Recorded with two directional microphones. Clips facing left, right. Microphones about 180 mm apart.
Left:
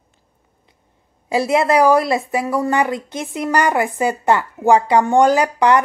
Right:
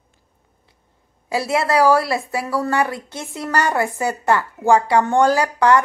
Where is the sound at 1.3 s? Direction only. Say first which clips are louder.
Left 3 dB; 20° left (ahead or behind).